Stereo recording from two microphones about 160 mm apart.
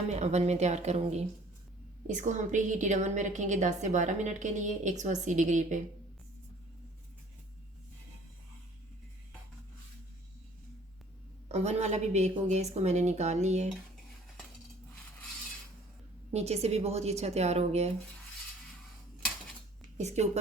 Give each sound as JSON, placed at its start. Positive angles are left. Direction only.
{"t": 0.1, "sound": "a woman's voice", "side_deg": -45}
{"t": 11.4, "sound": "a woman's voice", "side_deg": -45}
{"t": 16.3, "sound": "a woman's voice", "side_deg": -40}
{"t": 20.0, "sound": "a woman's voice", "side_deg": -45}